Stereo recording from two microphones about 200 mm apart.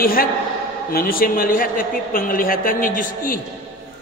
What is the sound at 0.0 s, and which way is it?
A man's voice, 45° left (ahead or behind).